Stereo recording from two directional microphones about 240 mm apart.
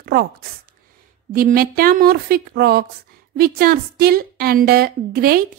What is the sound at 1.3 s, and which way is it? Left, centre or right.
A woman's voice, right.